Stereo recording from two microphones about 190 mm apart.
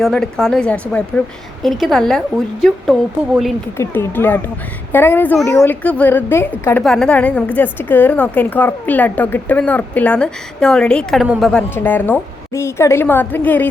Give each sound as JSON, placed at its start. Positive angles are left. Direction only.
{"t": 0.0, "sound": "a woman's voice", "side_deg": 5}
{"t": 3.8, "sound": "a woman's voice", "side_deg": 10}
{"t": 11.7, "sound": "a woman's voice", "side_deg": 10}